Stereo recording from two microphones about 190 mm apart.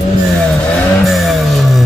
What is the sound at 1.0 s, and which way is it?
Music, centre (ahead or behind).